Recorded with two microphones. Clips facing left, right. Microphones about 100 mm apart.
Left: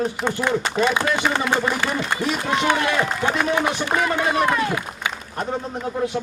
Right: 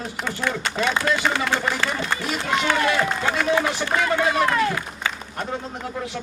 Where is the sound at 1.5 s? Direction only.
15° left (ahead or behind).